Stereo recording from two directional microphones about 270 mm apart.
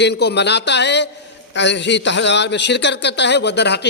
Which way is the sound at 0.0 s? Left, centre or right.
Left.